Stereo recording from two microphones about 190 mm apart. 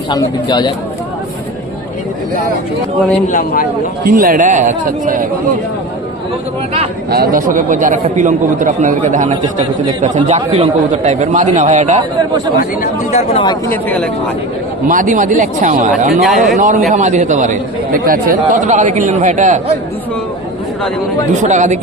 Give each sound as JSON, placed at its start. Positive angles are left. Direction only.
{"t": 0.1, "sound": "speech", "side_deg": 20}
{"t": 3.2, "sound": "a man's voice", "side_deg": 45}
{"t": 4.0, "sound": "a man's voice", "side_deg": -45}
{"t": 7.1, "sound": "a man's voice", "side_deg": -50}
{"t": 12.5, "sound": "speech", "side_deg": 40}
{"t": 13.7, "sound": "speech", "side_deg": 10}
{"t": 14.8, "sound": "a man's voice", "side_deg": -45}
{"t": 16.2, "sound": "a man's voice", "side_deg": 0}
{"t": 16.6, "sound": "a man's voice", "side_deg": -45}
{"t": 21.4, "sound": "speech", "side_deg": -40}